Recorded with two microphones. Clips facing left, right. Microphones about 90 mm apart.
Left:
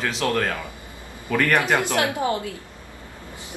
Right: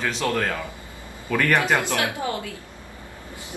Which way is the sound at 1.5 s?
20° left (ahead or behind).